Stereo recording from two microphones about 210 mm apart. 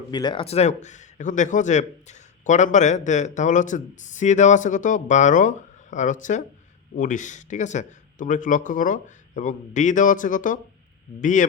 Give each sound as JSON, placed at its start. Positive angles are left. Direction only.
{"t": 0.1, "sound": "speech", "side_deg": 20}